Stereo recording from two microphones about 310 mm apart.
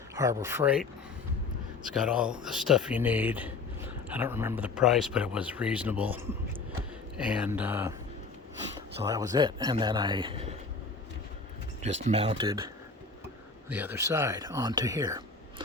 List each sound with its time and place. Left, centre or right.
0.2 s speech: centre
9.0 s speech: centre
12.0 s speech: centre